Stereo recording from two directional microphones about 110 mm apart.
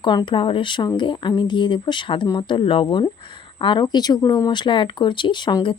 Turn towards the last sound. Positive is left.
turn(degrees=40)  # may be behind; listen again after turning